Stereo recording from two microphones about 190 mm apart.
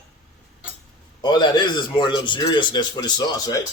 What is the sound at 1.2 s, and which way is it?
A man's voice, 25° left (ahead or behind).